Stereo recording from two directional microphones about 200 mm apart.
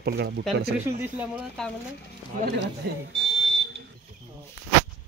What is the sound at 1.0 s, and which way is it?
Speech, 5° right (ahead or behind).